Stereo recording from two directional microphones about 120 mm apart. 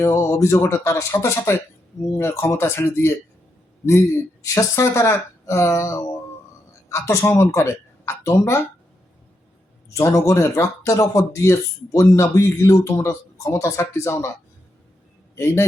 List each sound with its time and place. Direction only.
0.0 s speech: 25° left (ahead or behind)
4.4 s speech: 25° left (ahead or behind)
9.9 s speech: 25° left (ahead or behind)
15.4 s speech: 20° left (ahead or behind)